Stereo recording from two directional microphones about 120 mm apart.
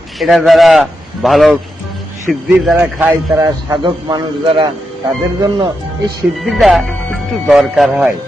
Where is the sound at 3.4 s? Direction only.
30° right (ahead or behind).